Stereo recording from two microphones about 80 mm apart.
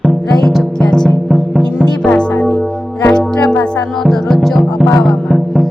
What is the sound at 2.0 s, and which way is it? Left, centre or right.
Music, centre.